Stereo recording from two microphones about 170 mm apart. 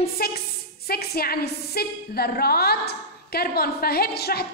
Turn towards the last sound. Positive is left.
turn(degrees=65)  # may be behind; listen again after turning